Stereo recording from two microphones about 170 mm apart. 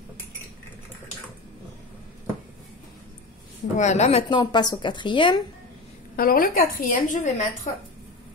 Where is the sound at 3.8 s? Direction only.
40° left (ahead or behind).